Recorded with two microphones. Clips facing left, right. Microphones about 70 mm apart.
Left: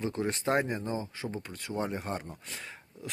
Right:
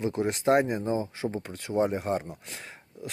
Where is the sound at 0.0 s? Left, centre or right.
Centre.